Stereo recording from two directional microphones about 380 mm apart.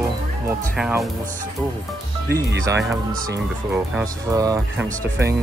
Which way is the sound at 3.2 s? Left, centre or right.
Centre.